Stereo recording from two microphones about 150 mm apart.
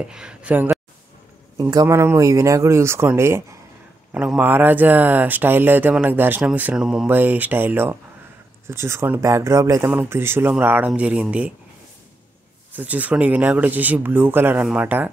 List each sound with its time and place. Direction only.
0.0 s speech: 5° right (ahead or behind)
1.6 s speech: 25° right (ahead or behind); by 11.5 s 10° right (ahead or behind)
12.7 s speech: 10° right (ahead or behind)